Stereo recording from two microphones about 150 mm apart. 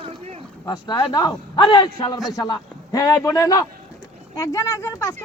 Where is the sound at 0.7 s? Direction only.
30° left (ahead or behind).